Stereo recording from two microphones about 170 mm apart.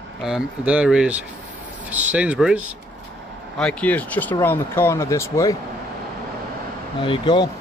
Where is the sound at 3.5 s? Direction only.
5° left (ahead or behind).